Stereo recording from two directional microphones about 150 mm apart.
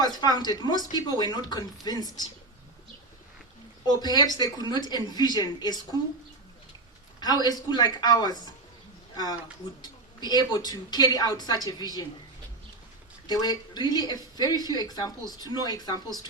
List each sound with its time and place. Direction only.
0.0 s a woman's voice: 25° left (ahead or behind)
3.8 s a woman's voice: 25° left (ahead or behind)
7.2 s a woman's voice: 25° left (ahead or behind)
13.2 s a woman's voice: 25° left (ahead or behind)